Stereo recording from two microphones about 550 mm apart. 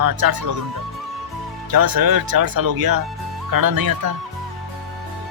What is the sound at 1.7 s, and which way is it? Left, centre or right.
Speech, right.